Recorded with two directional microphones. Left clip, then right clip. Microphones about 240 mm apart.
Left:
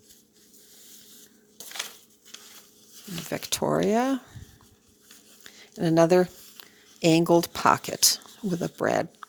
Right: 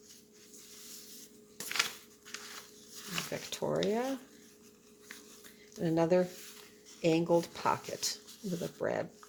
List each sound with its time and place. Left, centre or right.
3.3 s speech: left
5.4 s a sound: left
7.0 s speech: left